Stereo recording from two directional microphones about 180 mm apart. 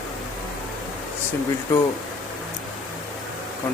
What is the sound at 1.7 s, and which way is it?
Speech, 15° left (ahead or behind).